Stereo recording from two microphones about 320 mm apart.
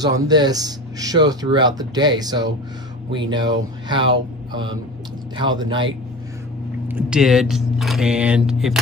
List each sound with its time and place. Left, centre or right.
0.0 s speech: centre
6.9 s speech: centre